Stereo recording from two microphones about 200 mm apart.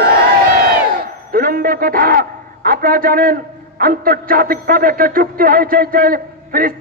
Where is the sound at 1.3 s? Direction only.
45° right (ahead or behind).